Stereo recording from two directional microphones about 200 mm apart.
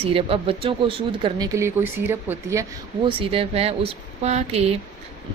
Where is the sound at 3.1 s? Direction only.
25° right (ahead or behind).